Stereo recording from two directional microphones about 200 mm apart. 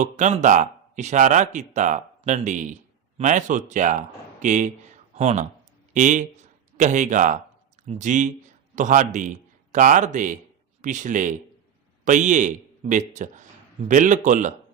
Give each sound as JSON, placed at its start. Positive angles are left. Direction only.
{"t": 0.0, "sound": "speech", "side_deg": -35}